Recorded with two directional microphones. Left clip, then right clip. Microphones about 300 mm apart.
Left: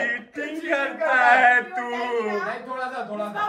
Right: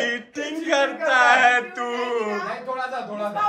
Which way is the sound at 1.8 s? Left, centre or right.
Centre.